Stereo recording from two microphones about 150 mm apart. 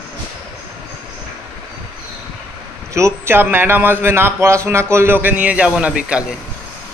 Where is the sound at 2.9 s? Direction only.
15° right (ahead or behind).